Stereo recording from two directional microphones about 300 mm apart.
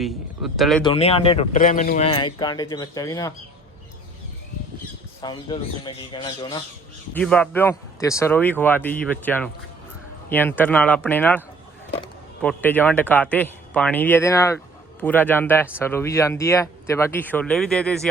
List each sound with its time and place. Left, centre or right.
0.0 s speech: centre
0.9 s speech: centre
5.2 s speech: centre
7.1 s speech: centre